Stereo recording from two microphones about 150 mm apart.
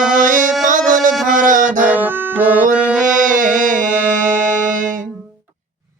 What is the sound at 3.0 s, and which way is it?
Music, 60° right (ahead or behind).